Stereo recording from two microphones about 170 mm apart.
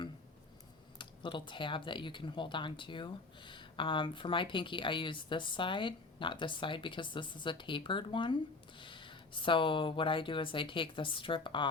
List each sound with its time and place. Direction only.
0.9 s speech: 30° left (ahead or behind)